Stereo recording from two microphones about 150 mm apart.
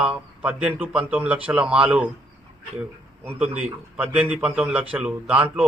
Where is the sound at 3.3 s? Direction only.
10° right (ahead or behind).